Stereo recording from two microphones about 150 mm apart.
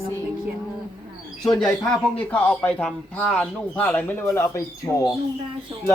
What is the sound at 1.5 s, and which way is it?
A man's voice, 5° left (ahead or behind).